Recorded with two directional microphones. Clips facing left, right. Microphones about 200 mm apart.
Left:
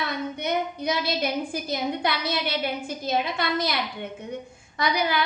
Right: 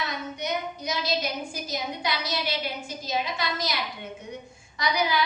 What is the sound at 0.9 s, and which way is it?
A woman's voice, 60° left (ahead or behind).